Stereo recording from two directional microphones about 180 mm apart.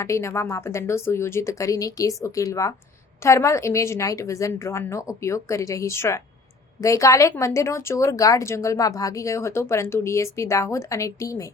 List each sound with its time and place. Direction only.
0.0 s speech: 15° left (ahead or behind)